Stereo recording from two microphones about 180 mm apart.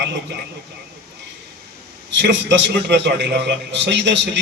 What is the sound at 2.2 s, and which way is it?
A man's voice, 80° right.